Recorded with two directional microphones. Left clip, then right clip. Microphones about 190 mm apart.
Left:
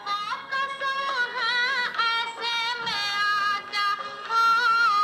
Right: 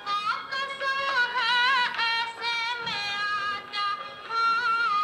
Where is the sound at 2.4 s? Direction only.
40° left (ahead or behind).